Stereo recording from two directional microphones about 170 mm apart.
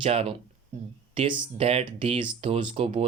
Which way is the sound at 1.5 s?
35° right (ahead or behind).